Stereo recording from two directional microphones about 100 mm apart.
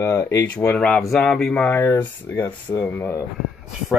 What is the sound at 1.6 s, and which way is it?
Speech, 25° left (ahead or behind).